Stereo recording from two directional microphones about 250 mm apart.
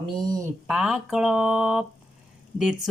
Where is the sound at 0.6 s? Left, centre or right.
Centre.